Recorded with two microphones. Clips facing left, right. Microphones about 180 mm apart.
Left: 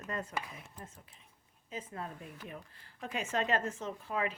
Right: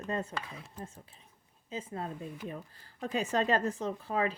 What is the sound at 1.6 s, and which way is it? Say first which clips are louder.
Speech: right 4 dB; 30° right (ahead or behind).